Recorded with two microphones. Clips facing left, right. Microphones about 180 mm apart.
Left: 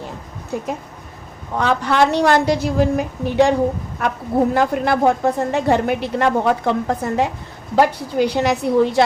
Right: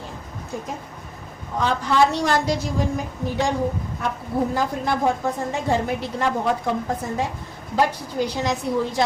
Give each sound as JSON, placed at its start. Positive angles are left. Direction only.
{"t": 1.5, "sound": "a woman's voice", "side_deg": 70}